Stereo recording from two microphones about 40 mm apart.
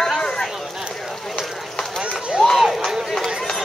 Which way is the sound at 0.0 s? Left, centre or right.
Centre.